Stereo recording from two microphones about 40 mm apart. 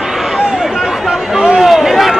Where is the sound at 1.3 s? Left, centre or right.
Right.